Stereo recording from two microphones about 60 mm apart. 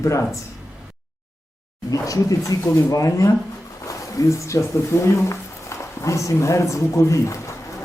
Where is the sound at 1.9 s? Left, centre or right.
Left.